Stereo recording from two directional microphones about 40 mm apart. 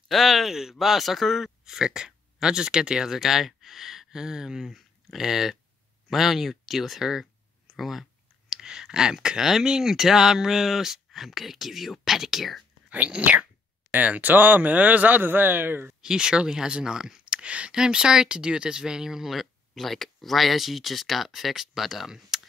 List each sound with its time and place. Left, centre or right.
0.1 s speech: centre
6.0 s a sound: centre
8.5 s speech: centre
12.9 s speech: right
13.9 s speech: right
16.0 s speech: centre
17.2 s a sound: right
17.7 s speech: centre
19.3 s speech: centre